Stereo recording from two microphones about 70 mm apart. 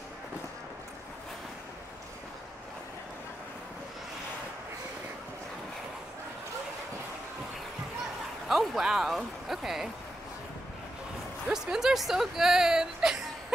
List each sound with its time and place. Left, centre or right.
8.5 s speech: centre
11.4 s speech: centre